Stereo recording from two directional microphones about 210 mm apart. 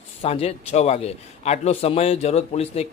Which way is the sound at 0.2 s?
30° left (ahead or behind).